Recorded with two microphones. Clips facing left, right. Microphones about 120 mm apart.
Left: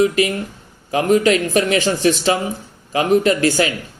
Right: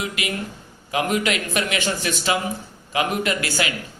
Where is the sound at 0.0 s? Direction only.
35° left (ahead or behind).